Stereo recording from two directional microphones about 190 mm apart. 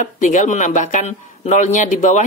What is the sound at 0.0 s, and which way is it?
Speech, 40° left (ahead or behind).